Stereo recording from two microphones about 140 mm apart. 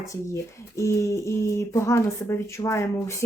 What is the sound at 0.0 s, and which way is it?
Speech, 20° left (ahead or behind).